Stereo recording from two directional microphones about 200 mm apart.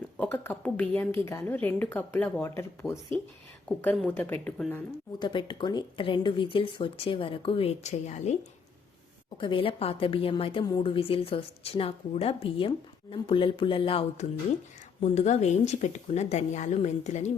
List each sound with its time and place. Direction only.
0.2 s a woman's voice: 10° left (ahead or behind)
3.7 s speech: 5° left (ahead or behind)
5.2 s a woman's voice: 25° left (ahead or behind)
9.4 s a woman's voice: 25° left (ahead or behind)